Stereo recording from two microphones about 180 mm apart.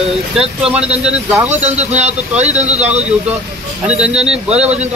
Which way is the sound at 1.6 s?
35° right (ahead or behind).